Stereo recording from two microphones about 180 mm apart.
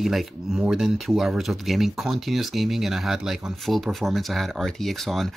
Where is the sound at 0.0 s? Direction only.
Centre (ahead or behind).